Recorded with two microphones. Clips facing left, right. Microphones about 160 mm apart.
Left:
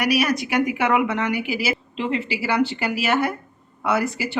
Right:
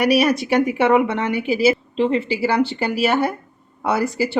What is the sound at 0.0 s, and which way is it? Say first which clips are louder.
Speech: right 4 dB; 30° right (ahead or behind).